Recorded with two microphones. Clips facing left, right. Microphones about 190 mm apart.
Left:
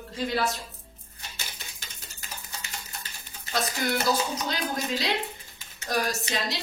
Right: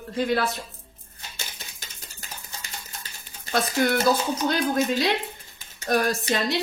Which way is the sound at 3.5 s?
55° right (ahead or behind).